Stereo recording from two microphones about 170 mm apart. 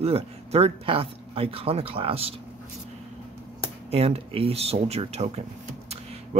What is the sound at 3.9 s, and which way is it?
Speech, 35° right (ahead or behind).